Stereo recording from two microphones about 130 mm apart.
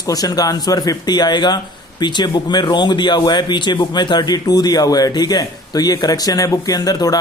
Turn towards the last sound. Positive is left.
turn(degrees=30)  # may be behind; listen again after turning